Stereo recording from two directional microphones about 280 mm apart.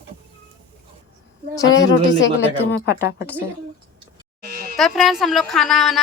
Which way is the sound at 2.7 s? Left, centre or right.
Left.